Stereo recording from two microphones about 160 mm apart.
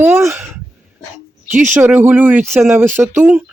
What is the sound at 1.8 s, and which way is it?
Speech, 10° right (ahead or behind).